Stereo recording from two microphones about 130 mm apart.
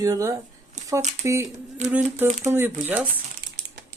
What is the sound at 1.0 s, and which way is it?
Speech, 60° right (ahead or behind).